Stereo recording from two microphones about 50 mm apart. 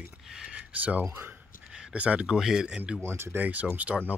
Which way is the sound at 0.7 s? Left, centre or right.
Right.